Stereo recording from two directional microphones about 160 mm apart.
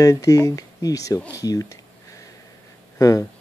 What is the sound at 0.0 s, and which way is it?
Speech, 20° left (ahead or behind).